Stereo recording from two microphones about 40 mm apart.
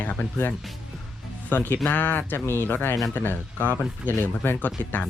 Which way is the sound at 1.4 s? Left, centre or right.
Left.